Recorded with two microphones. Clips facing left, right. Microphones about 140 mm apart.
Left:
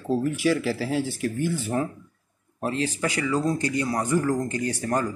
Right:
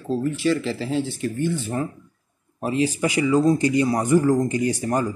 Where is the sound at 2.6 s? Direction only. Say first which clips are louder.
Right 4 dB; 10° right (ahead or behind).